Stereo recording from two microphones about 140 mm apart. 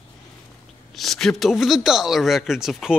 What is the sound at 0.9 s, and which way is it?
Speech, centre (ahead or behind).